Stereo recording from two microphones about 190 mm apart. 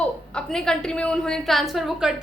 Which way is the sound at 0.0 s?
5° left (ahead or behind).